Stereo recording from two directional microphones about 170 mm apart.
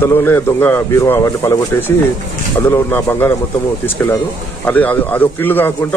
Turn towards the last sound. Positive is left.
turn(degrees=10)  # may be behind; listen again after turning